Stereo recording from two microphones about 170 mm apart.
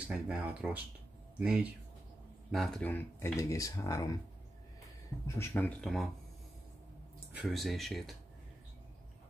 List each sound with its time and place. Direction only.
0.1 s speech: 5° right (ahead or behind); by 4.2 s 20° left (ahead or behind)
5.2 s speech: 15° left (ahead or behind)
7.3 s speech: centre (ahead or behind)